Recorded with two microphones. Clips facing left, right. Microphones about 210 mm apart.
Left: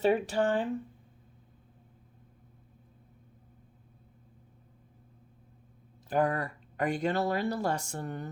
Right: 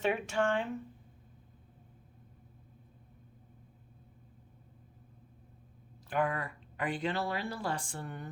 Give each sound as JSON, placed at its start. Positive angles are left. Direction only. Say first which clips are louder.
{"t": 0.0, "sound": "speech", "louder": "left 5 dB", "side_deg": 35}
{"t": 6.1, "sound": "speech", "louder": "left 4 dB", "side_deg": 40}